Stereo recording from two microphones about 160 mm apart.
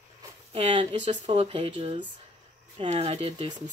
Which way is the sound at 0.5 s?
35° right (ahead or behind).